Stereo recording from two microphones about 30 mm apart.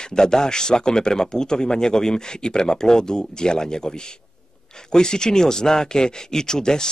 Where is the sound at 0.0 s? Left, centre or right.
Left.